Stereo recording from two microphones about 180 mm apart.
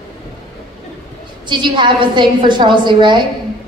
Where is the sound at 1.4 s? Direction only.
25° right (ahead or behind).